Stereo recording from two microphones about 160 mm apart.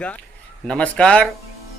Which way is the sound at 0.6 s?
5° left (ahead or behind).